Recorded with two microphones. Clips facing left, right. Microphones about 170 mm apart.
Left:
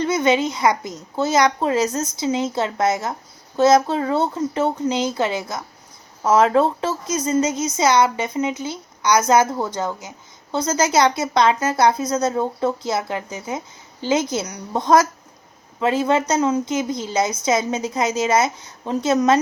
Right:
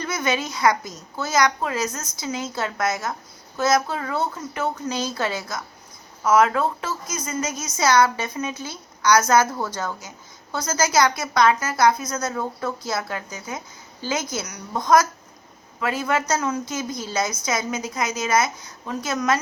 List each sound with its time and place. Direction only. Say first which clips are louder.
0.0 s a woman's voice: left 7 dB; 25° left (ahead or behind)